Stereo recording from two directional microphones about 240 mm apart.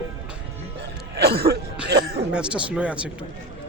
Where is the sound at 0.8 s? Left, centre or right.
Right.